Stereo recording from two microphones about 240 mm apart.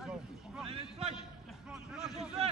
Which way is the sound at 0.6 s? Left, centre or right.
Right.